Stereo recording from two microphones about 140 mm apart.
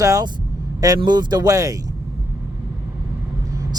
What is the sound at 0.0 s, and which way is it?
Speech, 25° right (ahead or behind).